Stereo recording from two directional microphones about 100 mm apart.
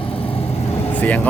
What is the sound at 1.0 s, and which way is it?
Speech, 15° left (ahead or behind).